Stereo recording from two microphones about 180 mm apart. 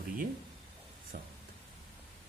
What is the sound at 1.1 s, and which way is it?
Speech, 45° right (ahead or behind).